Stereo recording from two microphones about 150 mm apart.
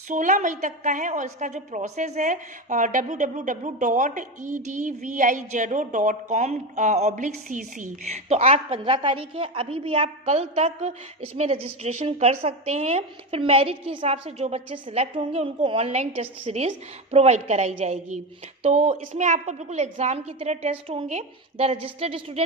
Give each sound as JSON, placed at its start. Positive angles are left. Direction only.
{"t": 0.1, "sound": "a woman's voice", "side_deg": -60}